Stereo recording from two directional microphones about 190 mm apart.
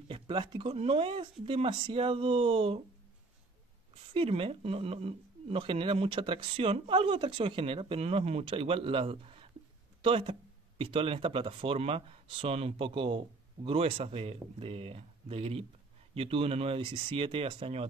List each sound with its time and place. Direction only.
0.1 s speech: 25° right (ahead or behind)
3.9 s speech: 30° right (ahead or behind)